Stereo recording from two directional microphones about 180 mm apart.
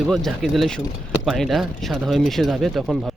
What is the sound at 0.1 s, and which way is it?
Speech, centre (ahead or behind).